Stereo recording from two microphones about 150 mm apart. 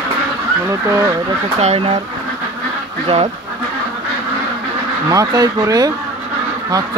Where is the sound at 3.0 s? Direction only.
40° right (ahead or behind).